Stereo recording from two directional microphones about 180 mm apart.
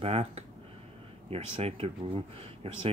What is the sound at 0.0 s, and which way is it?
Speech, 35° right (ahead or behind).